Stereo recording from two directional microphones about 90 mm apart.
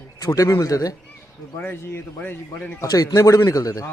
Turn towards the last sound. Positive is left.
turn(degrees=40)  # may be behind; listen again after turning